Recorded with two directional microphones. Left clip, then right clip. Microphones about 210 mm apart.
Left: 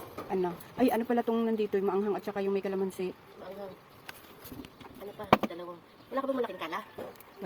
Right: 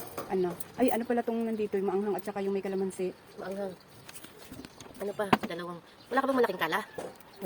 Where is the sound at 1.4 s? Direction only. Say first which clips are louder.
Left 2 dB; 15° left (ahead or behind).